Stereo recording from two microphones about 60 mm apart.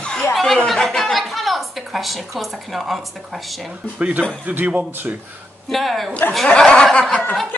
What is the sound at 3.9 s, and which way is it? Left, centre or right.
A man's voice, right.